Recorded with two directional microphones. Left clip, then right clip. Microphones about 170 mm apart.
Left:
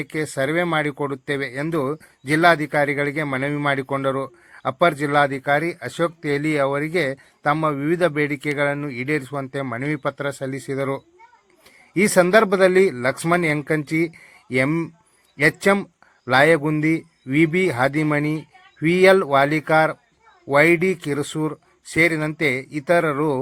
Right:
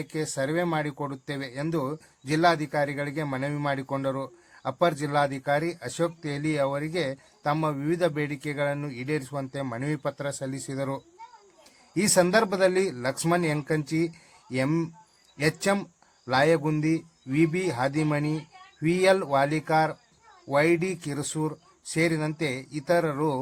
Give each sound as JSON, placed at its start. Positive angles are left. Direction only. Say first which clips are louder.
{"t": 0.0, "sound": "speech", "louder": "left 6 dB", "side_deg": 20}